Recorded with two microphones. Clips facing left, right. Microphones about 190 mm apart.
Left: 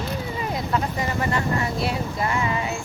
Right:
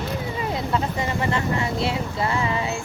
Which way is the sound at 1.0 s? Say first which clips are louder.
Even; 25° right (ahead or behind).